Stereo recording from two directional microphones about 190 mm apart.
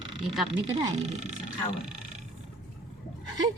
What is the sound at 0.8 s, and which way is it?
Speech, 35° right (ahead or behind).